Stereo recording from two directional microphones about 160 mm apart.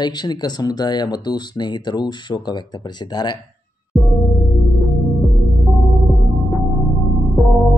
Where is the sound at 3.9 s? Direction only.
Centre (ahead or behind).